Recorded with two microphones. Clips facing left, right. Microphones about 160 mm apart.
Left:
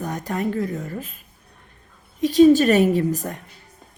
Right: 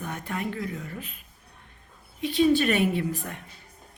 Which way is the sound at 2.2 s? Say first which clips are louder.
Left 8 dB; 40° left (ahead or behind).